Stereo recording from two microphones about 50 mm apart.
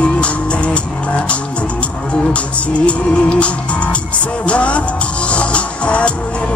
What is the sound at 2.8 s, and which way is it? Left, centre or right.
Music, left.